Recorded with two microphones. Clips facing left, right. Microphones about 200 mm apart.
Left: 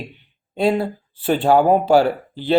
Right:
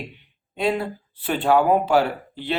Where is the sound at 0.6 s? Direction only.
35° left (ahead or behind).